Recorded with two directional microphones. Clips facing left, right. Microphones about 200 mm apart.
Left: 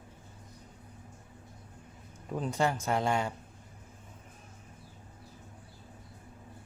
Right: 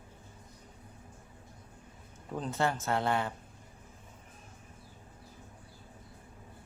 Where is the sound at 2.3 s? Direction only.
10° left (ahead or behind).